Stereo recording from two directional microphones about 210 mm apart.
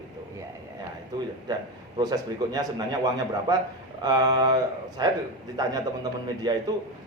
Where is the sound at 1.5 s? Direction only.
20° right (ahead or behind).